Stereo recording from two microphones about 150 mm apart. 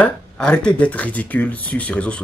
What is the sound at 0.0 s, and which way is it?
Speech, 5° left (ahead or behind).